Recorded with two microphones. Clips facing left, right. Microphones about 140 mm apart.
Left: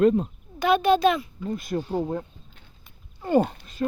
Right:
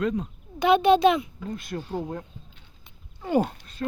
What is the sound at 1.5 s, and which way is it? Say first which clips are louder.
Speech: left 5 dB; 10° left (ahead or behind).